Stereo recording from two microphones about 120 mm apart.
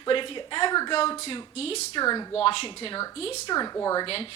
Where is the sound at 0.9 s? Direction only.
50° left (ahead or behind).